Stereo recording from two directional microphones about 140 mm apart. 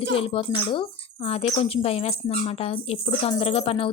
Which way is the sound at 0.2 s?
40° left (ahead or behind).